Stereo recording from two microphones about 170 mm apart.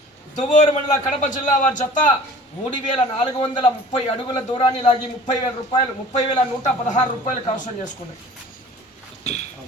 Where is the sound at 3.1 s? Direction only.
35° left (ahead or behind).